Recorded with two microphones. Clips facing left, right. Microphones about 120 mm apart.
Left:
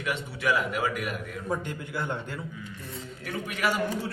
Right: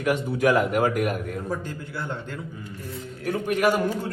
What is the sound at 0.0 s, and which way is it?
A man's voice, 50° right (ahead or behind).